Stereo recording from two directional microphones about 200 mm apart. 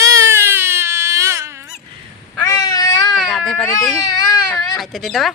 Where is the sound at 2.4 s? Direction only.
15° left (ahead or behind).